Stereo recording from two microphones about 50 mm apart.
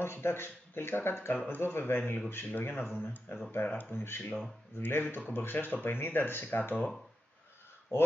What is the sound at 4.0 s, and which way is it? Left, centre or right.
A man's voice, left.